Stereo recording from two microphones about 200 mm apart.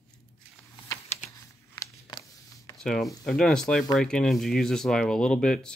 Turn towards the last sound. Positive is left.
turn(degrees=5)  # may be behind; listen again after turning